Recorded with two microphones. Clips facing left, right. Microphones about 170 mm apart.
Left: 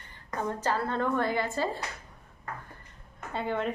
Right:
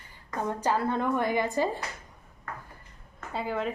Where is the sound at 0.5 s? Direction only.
15° right (ahead or behind).